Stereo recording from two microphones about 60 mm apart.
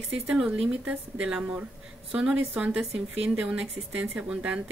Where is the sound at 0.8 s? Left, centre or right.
Right.